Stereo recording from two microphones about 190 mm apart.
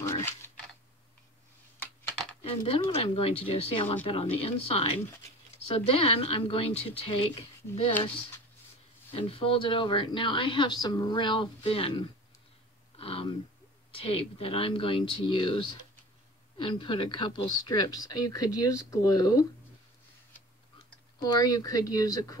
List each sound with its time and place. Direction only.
0.0 s computer keyboard: 15° left (ahead or behind)
2.4 s speech: 30° left (ahead or behind)
9.1 s speech: 30° left (ahead or behind)
12.9 s a sound: 30° left (ahead or behind)
13.9 s speech: 30° left (ahead or behind)
21.2 s speech: 20° left (ahead or behind)